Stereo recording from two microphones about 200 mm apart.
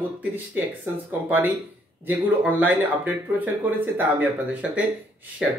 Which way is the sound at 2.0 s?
10° right (ahead or behind).